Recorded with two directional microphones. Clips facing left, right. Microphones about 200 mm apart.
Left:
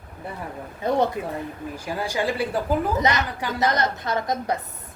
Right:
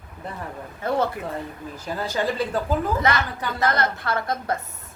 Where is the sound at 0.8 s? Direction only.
15° left (ahead or behind).